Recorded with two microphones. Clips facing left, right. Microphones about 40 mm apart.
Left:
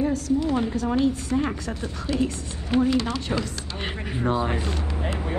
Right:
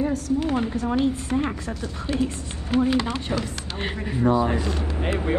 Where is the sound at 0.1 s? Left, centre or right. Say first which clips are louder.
Even; right.